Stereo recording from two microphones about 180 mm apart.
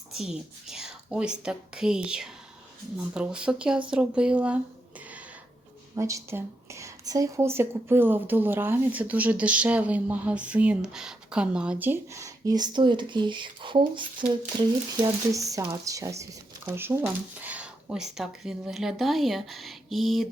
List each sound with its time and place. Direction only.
0.1 s a woman's voice: centre (ahead or behind)
6.0 s a woman's voice: 15° right (ahead or behind); by 20.3 s centre (ahead or behind)